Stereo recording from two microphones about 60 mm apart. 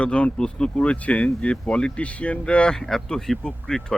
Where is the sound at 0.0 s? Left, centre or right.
Left.